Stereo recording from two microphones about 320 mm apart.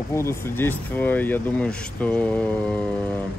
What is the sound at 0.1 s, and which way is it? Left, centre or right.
Speech, centre.